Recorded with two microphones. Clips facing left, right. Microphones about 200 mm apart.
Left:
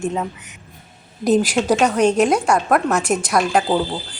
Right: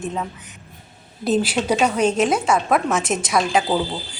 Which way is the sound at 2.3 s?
5° right (ahead or behind).